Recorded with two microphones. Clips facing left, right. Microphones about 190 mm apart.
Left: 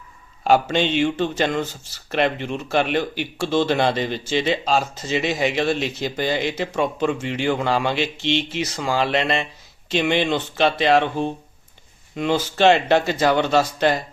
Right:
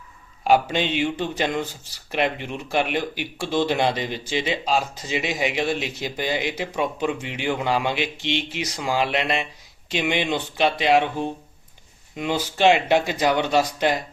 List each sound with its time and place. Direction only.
0.4 s speech: 10° right (ahead or behind)
12.1 s speech: 15° right (ahead or behind)